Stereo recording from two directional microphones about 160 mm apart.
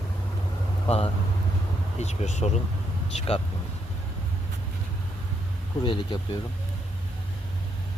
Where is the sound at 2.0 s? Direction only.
45° left (ahead or behind).